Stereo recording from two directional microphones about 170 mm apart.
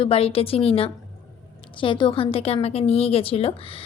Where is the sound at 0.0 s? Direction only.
35° left (ahead or behind).